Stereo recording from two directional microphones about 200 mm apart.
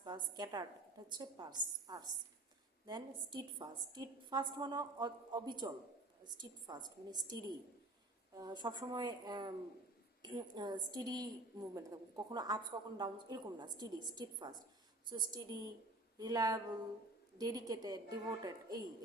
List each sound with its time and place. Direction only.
0.0 s a woman's voice: 20° right (ahead or behind)
8.4 s a woman's voice: 20° right (ahead or behind)